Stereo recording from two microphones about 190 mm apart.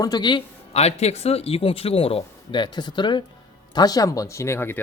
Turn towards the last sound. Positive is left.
turn(degrees=10)  # may be behind; listen again after turning